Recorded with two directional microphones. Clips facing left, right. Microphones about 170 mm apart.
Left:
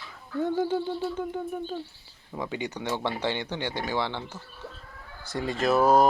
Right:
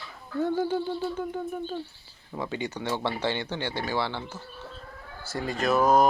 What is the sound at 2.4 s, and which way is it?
Speech, 15° left (ahead or behind).